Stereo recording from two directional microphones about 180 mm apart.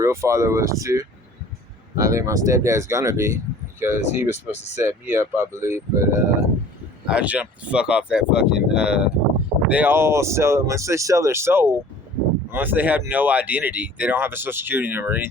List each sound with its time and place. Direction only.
0.0 s speech: 15° right (ahead or behind)